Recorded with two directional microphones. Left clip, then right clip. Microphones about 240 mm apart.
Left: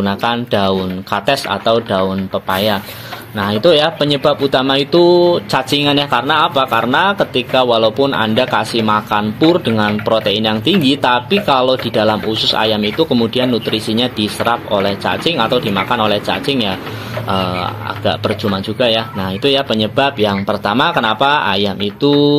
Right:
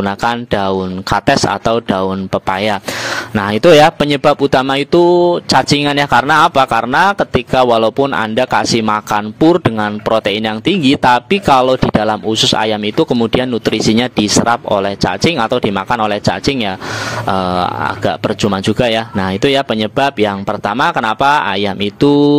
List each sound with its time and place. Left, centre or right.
0.0 s speech: right
10.7 s speech: right
11.0 s speech: right